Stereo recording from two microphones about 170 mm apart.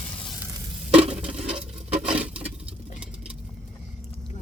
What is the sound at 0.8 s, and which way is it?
Stir, 35° right (ahead or behind).